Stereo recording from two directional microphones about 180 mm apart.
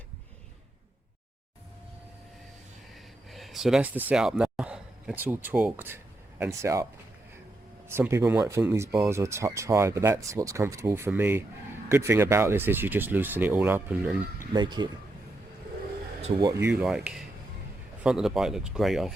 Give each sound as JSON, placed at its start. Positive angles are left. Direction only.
{"t": 2.9, "sound": "speech", "side_deg": 0}
{"t": 7.9, "sound": "speech", "side_deg": -15}
{"t": 14.5, "sound": "speech", "side_deg": -25}
{"t": 16.2, "sound": "speech", "side_deg": -25}
{"t": 16.6, "sound": "speech", "side_deg": -5}